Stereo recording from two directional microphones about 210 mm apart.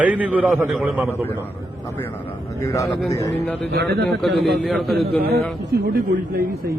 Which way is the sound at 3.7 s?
50° right (ahead or behind).